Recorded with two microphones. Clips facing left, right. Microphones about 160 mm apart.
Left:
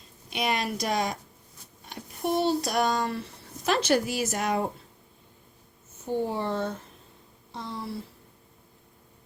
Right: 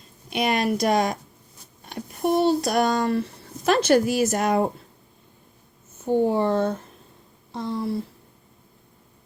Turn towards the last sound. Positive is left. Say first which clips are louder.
# right 8 dB
turn(degrees=-50)  # may be behind; listen again after turning